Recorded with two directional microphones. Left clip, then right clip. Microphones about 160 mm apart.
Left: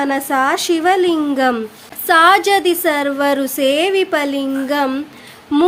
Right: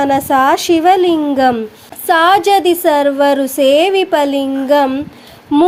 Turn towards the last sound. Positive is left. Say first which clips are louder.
# right 3 dB
turn(degrees=-5)  # may be behind; listen again after turning